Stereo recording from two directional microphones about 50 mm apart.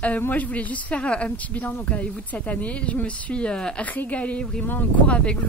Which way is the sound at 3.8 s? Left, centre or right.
Left.